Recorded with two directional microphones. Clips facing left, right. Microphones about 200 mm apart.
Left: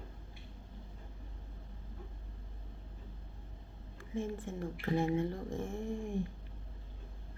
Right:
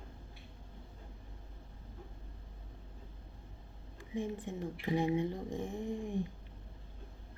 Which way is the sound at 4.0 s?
15° right (ahead or behind).